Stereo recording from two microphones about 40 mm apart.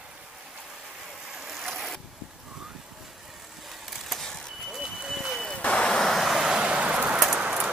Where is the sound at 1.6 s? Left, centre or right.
Centre.